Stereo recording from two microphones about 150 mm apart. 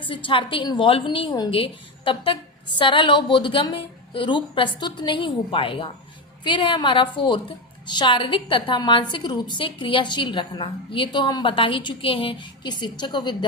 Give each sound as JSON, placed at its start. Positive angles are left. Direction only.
{"t": 0.0, "sound": "a woman's voice", "side_deg": 35}